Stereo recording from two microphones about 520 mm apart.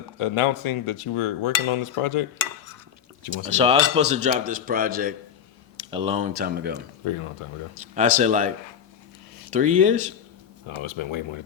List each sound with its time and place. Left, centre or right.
0.2 s cutlery: left
3.4 s speech: centre
7.9 s speech: centre
10.7 s speech: left